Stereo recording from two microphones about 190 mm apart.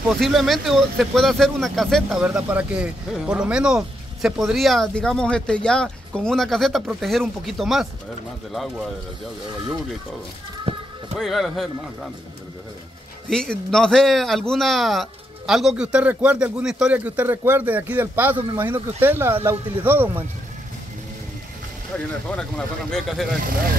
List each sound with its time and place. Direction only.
0.2 s speech: centre (ahead or behind)
11.1 s speech: centre (ahead or behind)
13.3 s a man's voice: 5° left (ahead or behind)
22.3 s speech: 5° left (ahead or behind)